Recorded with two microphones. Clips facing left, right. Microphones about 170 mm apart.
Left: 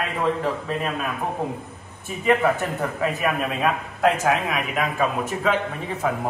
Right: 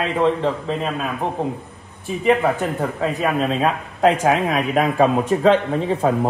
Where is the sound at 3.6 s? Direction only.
30° right (ahead or behind).